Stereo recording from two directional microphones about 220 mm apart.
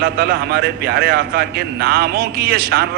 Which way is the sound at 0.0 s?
45° right (ahead or behind).